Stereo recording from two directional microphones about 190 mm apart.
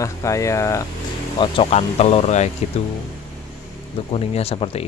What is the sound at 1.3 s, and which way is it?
Speech, 30° left (ahead or behind).